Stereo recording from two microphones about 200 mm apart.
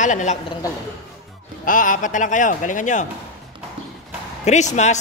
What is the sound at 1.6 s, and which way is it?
Speech, 40° left (ahead or behind).